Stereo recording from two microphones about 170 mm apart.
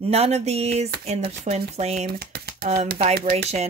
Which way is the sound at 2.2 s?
65° right (ahead or behind).